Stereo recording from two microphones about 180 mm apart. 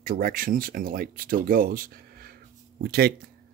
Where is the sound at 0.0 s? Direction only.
50° right (ahead or behind).